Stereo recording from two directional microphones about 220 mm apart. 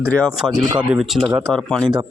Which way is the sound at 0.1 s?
5° left (ahead or behind).